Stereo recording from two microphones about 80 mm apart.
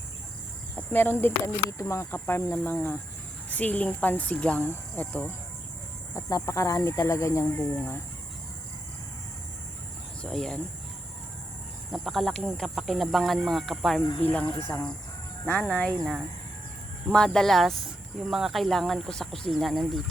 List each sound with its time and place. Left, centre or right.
0.8 s speech: left
6.1 s speech: left
10.2 s speech: centre
11.9 s speech: centre
14.2 s speech: left
14.7 s speech: centre
17.1 s speech: centre